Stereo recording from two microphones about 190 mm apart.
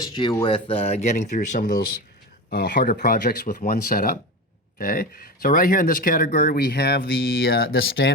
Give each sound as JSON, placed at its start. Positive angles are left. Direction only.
{"t": 0.1, "sound": "speech", "side_deg": 25}
{"t": 2.5, "sound": "speech", "side_deg": 55}